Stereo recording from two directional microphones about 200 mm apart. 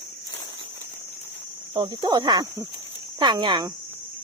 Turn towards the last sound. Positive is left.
turn(degrees=-20)  # may be behind; listen again after turning